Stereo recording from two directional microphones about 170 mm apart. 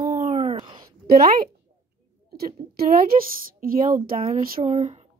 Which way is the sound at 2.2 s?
65° right (ahead or behind).